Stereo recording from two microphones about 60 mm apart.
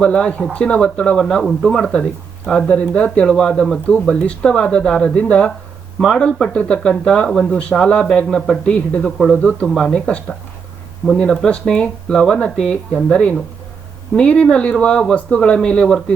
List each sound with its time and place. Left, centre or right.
0.0 s speech: centre
9.6 s speech: centre
9.9 s speech: centre